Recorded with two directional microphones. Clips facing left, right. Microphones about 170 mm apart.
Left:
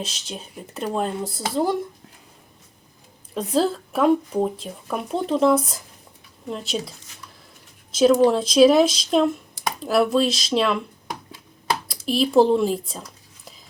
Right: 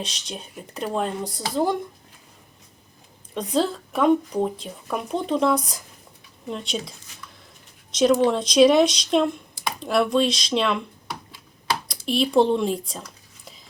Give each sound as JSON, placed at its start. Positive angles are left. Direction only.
{"t": 0.0, "sound": "speech", "side_deg": 5}
{"t": 3.3, "sound": "speech", "side_deg": 5}
{"t": 8.1, "sound": "speech", "side_deg": 5}
{"t": 11.9, "sound": "speech", "side_deg": 0}